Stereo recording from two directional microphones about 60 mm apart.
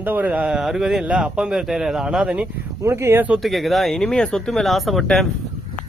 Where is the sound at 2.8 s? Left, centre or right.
Right.